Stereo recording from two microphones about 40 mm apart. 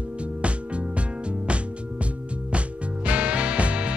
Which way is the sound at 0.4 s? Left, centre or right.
Right.